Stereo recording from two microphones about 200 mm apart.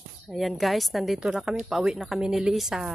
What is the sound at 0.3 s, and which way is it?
A woman's voice, centre (ahead or behind).